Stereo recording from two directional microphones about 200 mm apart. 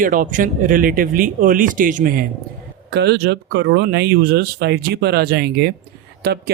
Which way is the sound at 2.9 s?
55° right (ahead or behind).